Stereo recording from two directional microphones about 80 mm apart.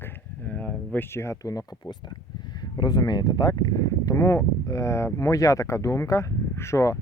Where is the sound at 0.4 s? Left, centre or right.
Centre.